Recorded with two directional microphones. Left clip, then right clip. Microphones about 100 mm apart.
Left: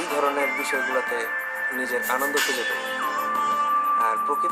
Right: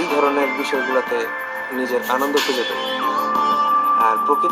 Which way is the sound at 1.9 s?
40° right (ahead or behind).